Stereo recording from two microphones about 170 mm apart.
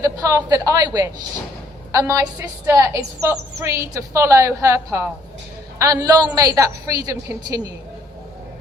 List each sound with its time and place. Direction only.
0.0 s a woman's voice: 20° right (ahead or behind)